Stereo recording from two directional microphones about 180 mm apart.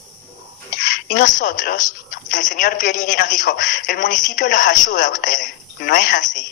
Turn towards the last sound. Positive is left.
turn(degrees=45)  # may be behind; listen again after turning